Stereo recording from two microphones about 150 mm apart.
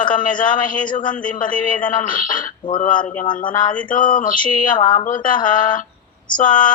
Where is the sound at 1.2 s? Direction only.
60° left (ahead or behind).